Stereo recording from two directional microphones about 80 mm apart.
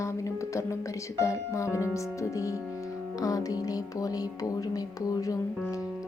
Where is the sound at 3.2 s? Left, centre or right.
Left.